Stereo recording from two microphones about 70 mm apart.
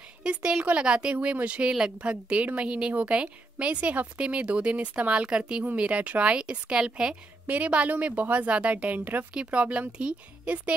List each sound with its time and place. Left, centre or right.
0.2 s a woman's voice: centre